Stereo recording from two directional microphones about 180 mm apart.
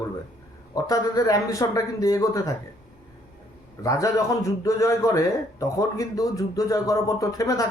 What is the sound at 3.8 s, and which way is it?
A man's voice, 20° left (ahead or behind).